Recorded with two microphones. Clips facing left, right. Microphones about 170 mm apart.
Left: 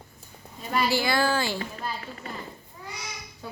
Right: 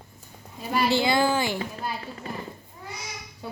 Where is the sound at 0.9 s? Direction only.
20° right (ahead or behind).